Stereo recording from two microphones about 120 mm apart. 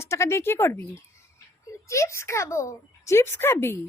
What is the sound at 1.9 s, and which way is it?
A child's voice, 25° left (ahead or behind).